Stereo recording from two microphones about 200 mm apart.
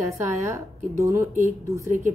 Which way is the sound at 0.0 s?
15° right (ahead or behind).